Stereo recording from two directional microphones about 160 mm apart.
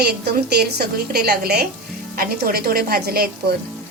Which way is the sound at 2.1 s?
70° right (ahead or behind).